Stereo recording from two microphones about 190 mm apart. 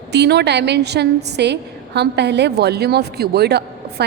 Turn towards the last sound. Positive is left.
turn(degrees=-60)  # may be behind; listen again after turning